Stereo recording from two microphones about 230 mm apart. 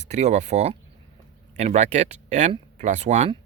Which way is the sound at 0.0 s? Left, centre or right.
Right.